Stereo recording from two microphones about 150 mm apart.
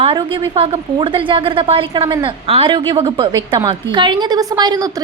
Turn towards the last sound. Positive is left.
turn(degrees=-25)  # may be behind; listen again after turning